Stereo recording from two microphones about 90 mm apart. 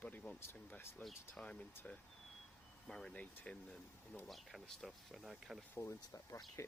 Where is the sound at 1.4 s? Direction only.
10° left (ahead or behind).